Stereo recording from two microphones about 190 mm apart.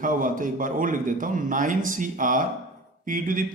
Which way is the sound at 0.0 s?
45° right (ahead or behind).